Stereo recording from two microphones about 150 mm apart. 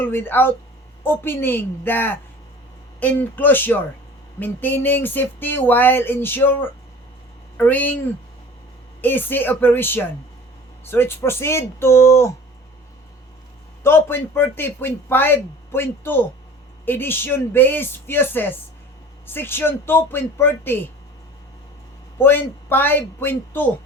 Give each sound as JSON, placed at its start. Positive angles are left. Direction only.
{"t": 0.0, "sound": "a man's voice", "side_deg": 15}
{"t": 9.0, "sound": "a man's voice", "side_deg": 15}
{"t": 13.8, "sound": "a man's voice", "side_deg": 15}
{"t": 22.2, "sound": "a man's voice", "side_deg": 15}